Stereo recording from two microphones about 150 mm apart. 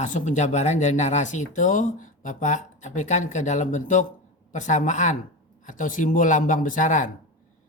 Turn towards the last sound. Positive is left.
turn(degrees=55)  # may be behind; listen again after turning